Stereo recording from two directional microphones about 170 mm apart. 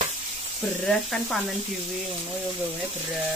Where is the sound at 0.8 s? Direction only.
5° left (ahead or behind).